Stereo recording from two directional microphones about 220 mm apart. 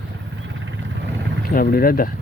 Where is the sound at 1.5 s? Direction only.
40° left (ahead or behind).